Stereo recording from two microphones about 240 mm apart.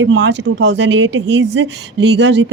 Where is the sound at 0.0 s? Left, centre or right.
Right.